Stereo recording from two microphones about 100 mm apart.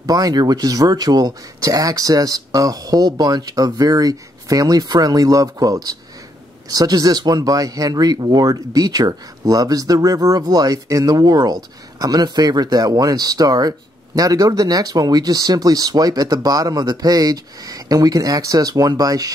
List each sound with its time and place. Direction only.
0.0 s speech: 40° right (ahead or behind)